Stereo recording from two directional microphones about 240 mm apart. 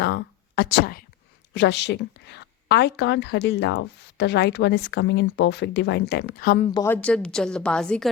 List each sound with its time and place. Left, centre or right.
0.0 s a woman's voice: left
6.7 s a woman's voice: centre